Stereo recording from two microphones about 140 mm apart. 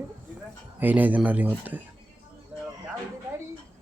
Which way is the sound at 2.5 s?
5° right (ahead or behind).